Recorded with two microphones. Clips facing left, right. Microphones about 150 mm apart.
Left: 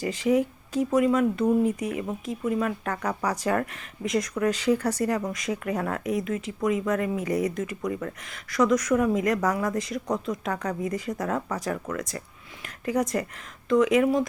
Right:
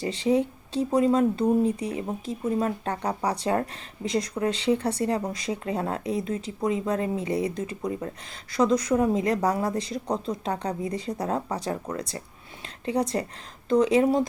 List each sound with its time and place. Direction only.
0.0 s speech: 30° right (ahead or behind)